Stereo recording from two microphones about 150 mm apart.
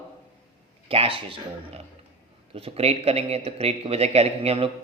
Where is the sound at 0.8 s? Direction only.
40° right (ahead or behind).